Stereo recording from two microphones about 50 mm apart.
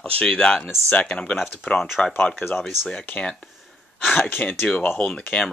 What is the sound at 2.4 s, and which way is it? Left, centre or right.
Speech, left.